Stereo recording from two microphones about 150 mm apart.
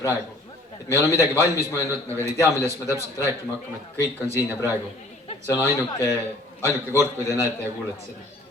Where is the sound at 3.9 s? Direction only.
20° left (ahead or behind).